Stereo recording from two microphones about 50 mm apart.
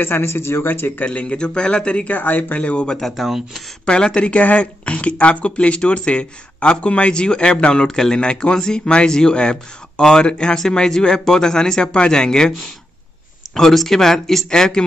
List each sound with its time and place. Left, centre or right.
0.0 s speech: left
1.0 s a man's voice: left
2.1 s speech: left
2.6 s a man's voice: left
3.0 s speech: centre
3.3 s speech: centre
3.8 s speech: centre
13.6 s speech: centre